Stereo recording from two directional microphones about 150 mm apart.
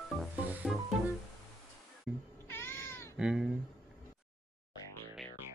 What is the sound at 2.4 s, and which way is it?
Cat, 15° left (ahead or behind).